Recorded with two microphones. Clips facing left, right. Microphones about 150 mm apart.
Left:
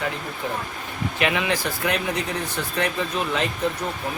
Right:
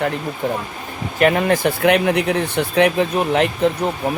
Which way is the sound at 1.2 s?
45° right (ahead or behind).